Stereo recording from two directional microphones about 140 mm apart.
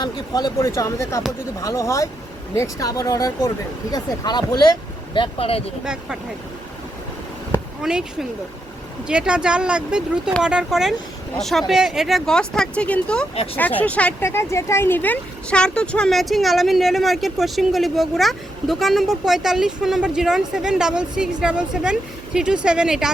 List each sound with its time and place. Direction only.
0.0 s speech: 30° left (ahead or behind)
5.8 s speech: 5° right (ahead or behind)
7.8 s speech: 5° right (ahead or behind)
9.0 s speech: 5° right (ahead or behind)
13.3 s speech: 45° left (ahead or behind)
13.6 s speech: 10° left (ahead or behind); by 23.1 s 5° right (ahead or behind)